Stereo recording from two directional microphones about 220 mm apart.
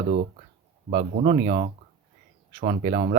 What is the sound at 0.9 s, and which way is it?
Speech, 25° right (ahead or behind).